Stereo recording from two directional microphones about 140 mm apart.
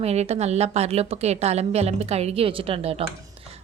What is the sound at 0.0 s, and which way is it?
A woman's voice, 50° right (ahead or behind).